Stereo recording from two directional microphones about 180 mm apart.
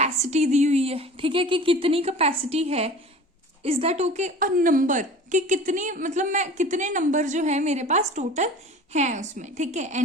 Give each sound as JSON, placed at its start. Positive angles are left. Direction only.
{"t": 0.0, "sound": "a woman's voice", "side_deg": -40}